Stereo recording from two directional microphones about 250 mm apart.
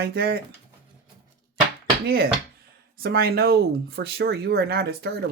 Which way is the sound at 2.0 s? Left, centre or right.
Right.